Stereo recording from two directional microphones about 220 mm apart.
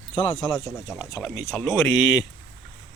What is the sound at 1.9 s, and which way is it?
Speech, 50° left (ahead or behind).